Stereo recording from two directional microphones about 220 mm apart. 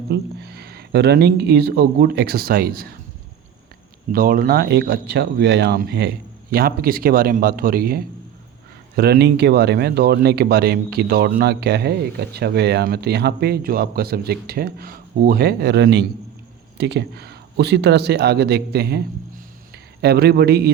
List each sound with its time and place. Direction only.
0.1 s speech: 45° right (ahead or behind)
4.1 s a man's voice: 40° right (ahead or behind)